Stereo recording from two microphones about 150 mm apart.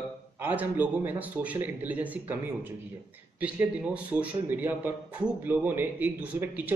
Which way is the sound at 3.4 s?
10° right (ahead or behind).